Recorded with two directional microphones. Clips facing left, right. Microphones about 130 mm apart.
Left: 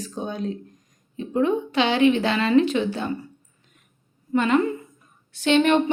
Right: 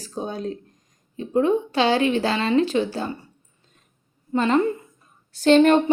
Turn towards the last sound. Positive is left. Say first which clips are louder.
# right 4 dB
turn(degrees=-40)  # may be behind; listen again after turning